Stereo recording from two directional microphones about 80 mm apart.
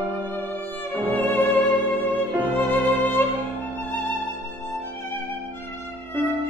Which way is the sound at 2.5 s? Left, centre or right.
Left.